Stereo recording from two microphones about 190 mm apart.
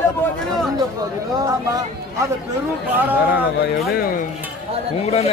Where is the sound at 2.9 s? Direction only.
10° right (ahead or behind).